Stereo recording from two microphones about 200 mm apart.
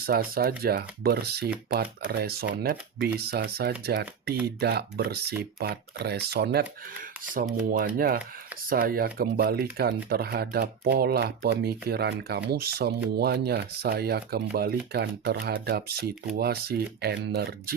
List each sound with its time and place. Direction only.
0.0 s speech: 50° right (ahead or behind)
7.7 s speech: 45° right (ahead or behind)